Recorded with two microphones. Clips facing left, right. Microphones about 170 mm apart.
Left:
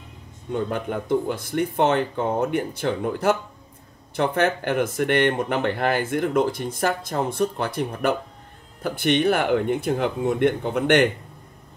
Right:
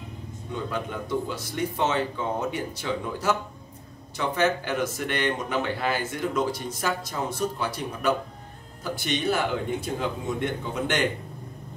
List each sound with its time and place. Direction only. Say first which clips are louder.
0.5 s speech: left 6 dB; 55° left (ahead or behind)